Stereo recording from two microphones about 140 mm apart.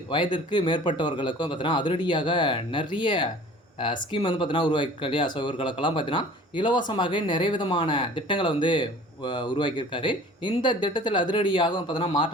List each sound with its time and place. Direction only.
0.1 s speech: 35° left (ahead or behind)